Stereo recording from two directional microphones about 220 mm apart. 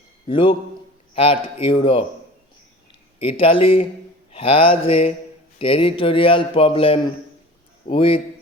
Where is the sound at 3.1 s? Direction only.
25° left (ahead or behind).